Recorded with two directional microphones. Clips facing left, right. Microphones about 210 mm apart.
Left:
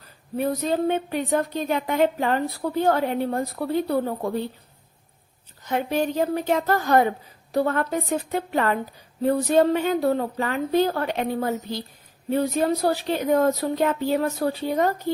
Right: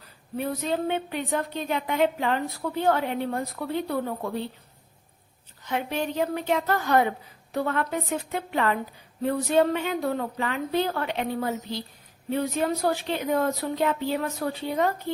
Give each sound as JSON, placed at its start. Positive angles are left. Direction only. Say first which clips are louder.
{"t": 0.3, "sound": "speech", "louder": "left 4 dB", "side_deg": 45}
{"t": 5.6, "sound": "speech", "louder": "left 5 dB", "side_deg": 40}